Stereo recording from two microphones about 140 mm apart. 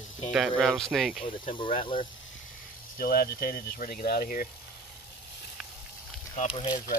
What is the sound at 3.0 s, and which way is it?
Speech, 90° left.